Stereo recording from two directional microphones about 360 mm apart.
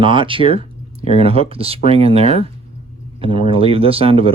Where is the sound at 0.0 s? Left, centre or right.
Centre.